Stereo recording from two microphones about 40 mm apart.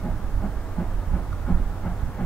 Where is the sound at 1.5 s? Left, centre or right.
Centre.